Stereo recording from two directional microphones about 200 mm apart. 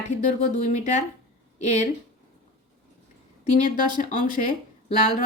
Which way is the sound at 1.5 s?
35° left (ahead or behind).